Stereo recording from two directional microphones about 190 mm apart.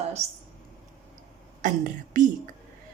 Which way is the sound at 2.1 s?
40° right (ahead or behind).